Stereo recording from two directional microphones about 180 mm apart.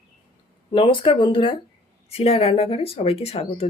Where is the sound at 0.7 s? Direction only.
30° left (ahead or behind).